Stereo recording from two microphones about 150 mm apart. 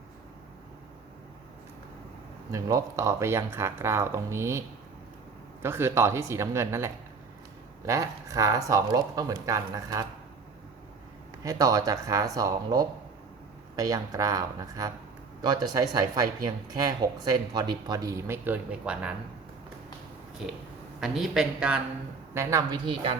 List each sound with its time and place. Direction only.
2.5 s speech: 20° right (ahead or behind)
5.6 s speech: 15° right (ahead or behind)
11.4 s speech: 25° right (ahead or behind); by 19.1 s 5° right (ahead or behind)
21.0 s a woman's voice: centre (ahead or behind)
22.4 s speech: 20° right (ahead or behind)